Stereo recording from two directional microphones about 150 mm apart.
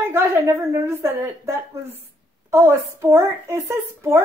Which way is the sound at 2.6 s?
20° right (ahead or behind).